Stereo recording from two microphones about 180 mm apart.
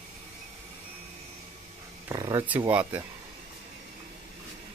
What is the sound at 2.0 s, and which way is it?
Speech, 20° right (ahead or behind).